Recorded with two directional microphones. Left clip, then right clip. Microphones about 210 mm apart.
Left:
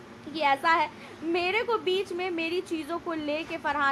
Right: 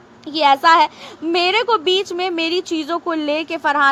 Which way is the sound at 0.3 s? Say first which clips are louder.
Right 12 dB; 35° right (ahead or behind).